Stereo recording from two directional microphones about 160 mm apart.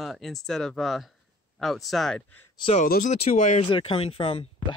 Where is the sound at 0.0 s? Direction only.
Centre (ahead or behind).